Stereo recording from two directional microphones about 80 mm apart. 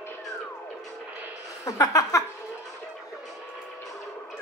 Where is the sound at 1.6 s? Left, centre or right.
Left.